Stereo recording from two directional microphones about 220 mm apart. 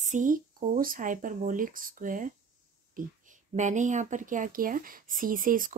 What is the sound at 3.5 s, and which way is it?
Speech, 35° right (ahead or behind).